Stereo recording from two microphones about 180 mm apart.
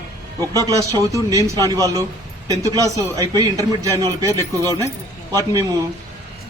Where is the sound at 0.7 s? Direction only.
20° right (ahead or behind).